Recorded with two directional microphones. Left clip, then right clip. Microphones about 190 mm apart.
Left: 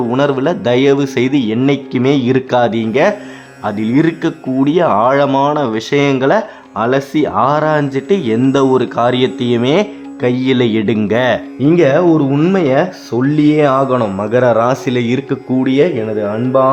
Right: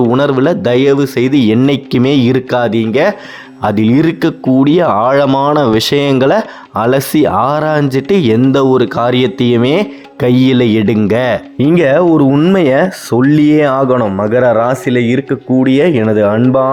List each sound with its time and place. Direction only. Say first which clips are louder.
0.1 s a man's voice: right 3 dB; 20° right (ahead or behind)
1.4 s speech: right 4 dB; 25° right (ahead or behind)
2.5 s a man's voice: right 1 dB; 10° right (ahead or behind)
3.6 s speech: right 3 dB; 35° right (ahead or behind)
11.6 s speech: right 1 dB; 35° right (ahead or behind)
12.3 s speech: right 3 dB; 25° right (ahead or behind)
15.7 s speech: right 2 dB; 35° right (ahead or behind)